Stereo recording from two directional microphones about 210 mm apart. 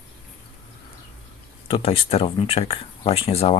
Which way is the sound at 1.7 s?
25° left (ahead or behind).